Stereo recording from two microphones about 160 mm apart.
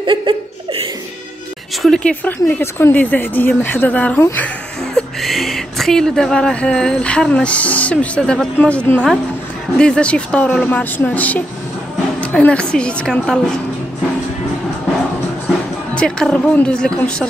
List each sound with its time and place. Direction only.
0.0 s speech: 30° right (ahead or behind)
1.8 s speech: 5° left (ahead or behind)
15.9 s speech: 5° left (ahead or behind)